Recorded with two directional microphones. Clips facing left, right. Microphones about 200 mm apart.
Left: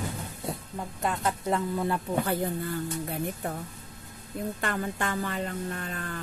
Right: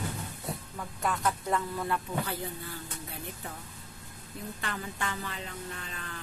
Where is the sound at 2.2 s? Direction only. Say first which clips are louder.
Left 8 dB; 50° left (ahead or behind).